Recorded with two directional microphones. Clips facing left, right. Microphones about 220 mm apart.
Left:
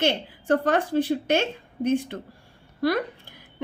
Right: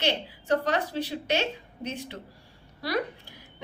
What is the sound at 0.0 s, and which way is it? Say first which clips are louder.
A woman's voice: left 4 dB; 50° left (ahead or behind).